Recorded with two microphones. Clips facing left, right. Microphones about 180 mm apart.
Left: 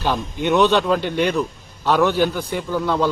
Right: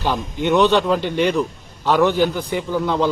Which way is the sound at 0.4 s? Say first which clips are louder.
Right 1 dB; 15° right (ahead or behind).